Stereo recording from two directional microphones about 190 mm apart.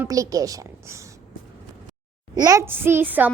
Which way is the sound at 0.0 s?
15° right (ahead or behind).